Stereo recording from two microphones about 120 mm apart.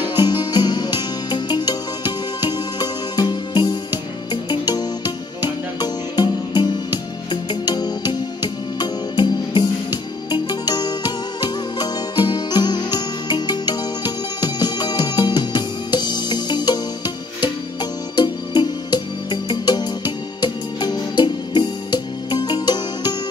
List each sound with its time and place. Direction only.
0.1 s music: 35° left (ahead or behind)